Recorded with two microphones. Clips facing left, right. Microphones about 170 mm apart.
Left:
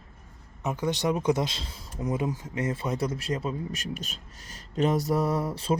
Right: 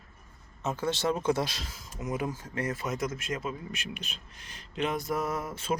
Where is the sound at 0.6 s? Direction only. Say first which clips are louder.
Left 2 dB; 15° left (ahead or behind).